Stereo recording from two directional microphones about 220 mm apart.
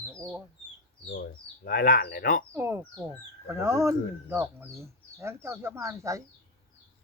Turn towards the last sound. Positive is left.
turn(degrees=-15)  # may be behind; listen again after turning